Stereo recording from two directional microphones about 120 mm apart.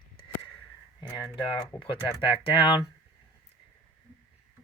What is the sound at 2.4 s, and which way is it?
Speech, 45° left (ahead or behind).